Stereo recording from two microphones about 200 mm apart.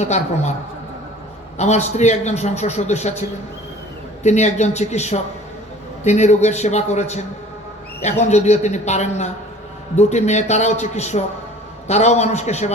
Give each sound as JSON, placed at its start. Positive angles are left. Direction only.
{"t": 0.0, "sound": "a man's voice", "side_deg": 35}
{"t": 1.5, "sound": "a man's voice", "side_deg": 35}
{"t": 8.2, "sound": "a man's voice", "side_deg": 35}